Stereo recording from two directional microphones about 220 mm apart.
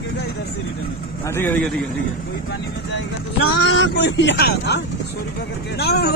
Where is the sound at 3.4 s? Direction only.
50° left (ahead or behind).